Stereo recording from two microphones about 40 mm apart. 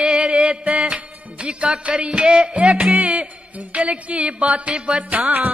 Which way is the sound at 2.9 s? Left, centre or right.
Right.